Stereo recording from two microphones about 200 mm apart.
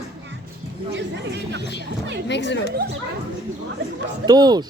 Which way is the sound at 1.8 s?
55° right (ahead or behind).